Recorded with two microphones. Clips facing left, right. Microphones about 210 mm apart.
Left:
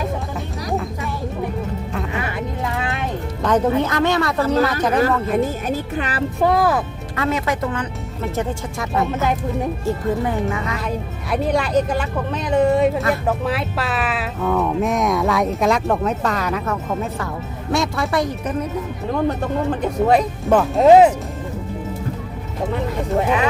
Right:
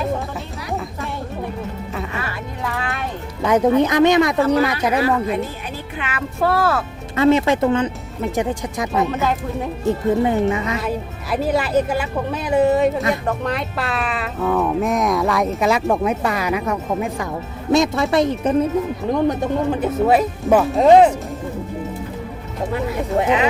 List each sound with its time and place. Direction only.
2.1 s music: 20° left (ahead or behind)
3.4 s speech: 10° right (ahead or behind)
5.3 s speech: 45° left (ahead or behind)
6.4 s speech: 15° left (ahead or behind)
7.2 s speech: 25° right (ahead or behind)
10.8 s speech: 5° right (ahead or behind); by 18.5 s 25° right (ahead or behind)
19.8 s speech: 5° right (ahead or behind)
22.7 s speech: 10° right (ahead or behind)